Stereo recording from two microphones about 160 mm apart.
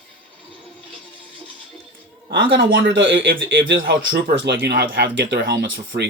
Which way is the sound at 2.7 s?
90° right.